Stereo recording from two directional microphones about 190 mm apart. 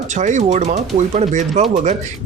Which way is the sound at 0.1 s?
40° right (ahead or behind).